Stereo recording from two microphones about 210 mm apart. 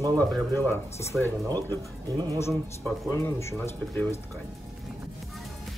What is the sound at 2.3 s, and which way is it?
Speech, 10° left (ahead or behind).